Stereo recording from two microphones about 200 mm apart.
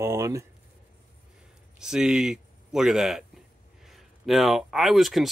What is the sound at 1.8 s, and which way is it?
Speech, 5° right (ahead or behind).